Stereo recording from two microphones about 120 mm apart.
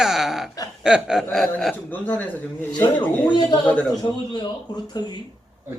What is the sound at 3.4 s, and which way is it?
Speech, 35° left (ahead or behind).